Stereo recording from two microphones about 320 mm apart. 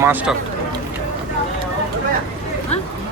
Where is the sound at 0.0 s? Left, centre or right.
Centre.